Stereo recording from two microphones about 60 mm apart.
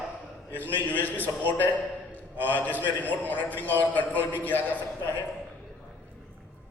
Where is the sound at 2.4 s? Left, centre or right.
Left.